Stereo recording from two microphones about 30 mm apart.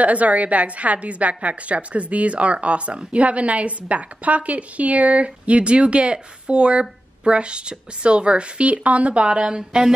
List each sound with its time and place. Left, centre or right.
0.0 s a woman's voice: right
9.6 s speech: right